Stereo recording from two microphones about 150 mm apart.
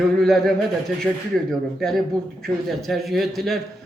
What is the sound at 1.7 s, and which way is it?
A man's voice, centre (ahead or behind).